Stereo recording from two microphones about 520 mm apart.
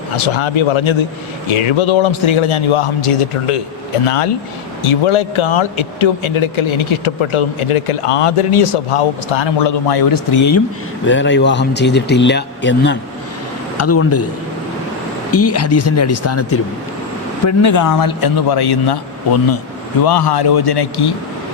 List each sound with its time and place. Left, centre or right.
0.2 s a man's voice: left
4.8 s a man's voice: left
11.0 s speech: left
15.3 s a man's voice: left
20.1 s a man's voice: left